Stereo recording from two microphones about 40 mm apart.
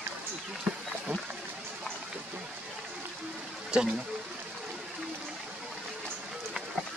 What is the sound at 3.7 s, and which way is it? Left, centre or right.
Speech, right.